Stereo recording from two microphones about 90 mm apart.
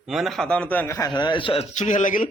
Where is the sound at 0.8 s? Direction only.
30° left (ahead or behind).